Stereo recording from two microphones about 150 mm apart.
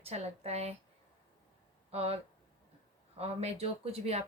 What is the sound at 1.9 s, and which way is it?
A woman's voice, 40° right (ahead or behind).